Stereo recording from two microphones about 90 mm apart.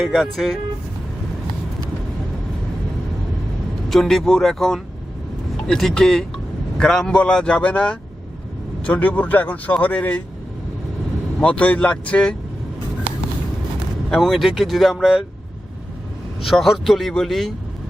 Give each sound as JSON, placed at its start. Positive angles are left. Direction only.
{"t": 0.0, "sound": "speech", "side_deg": -5}
{"t": 3.8, "sound": "speech", "side_deg": 5}
{"t": 11.3, "sound": "speech", "side_deg": 15}
{"t": 14.1, "sound": "speech", "side_deg": 0}
{"t": 16.4, "sound": "speech", "side_deg": 0}